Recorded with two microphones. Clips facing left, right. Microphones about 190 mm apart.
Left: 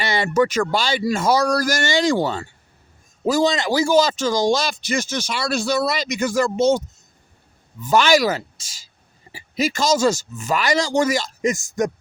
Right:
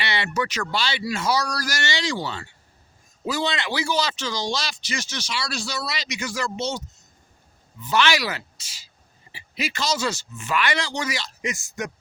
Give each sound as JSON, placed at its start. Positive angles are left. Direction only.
{"t": 0.0, "sound": "a man's voice", "side_deg": 45}